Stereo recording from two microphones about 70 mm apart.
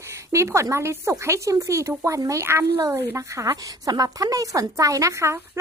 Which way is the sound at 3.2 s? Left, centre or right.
Right.